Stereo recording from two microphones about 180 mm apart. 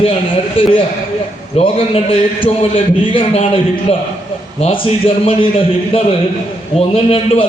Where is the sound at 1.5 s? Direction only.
30° left (ahead or behind).